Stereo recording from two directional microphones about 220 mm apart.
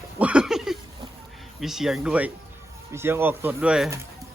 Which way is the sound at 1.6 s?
Centre (ahead or behind).